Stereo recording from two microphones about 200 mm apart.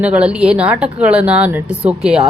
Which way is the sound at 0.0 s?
5° right (ahead or behind).